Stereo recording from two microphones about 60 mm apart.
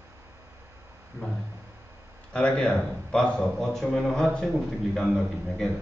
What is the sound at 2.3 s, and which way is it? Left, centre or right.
A man's voice, centre.